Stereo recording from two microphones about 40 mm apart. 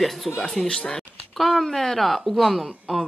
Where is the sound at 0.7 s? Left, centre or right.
Centre.